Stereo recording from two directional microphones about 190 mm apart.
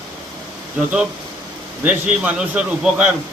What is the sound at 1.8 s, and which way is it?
A man's voice, 5° right (ahead or behind).